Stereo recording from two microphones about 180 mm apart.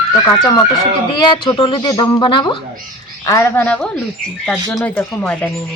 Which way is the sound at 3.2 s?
15° left (ahead or behind).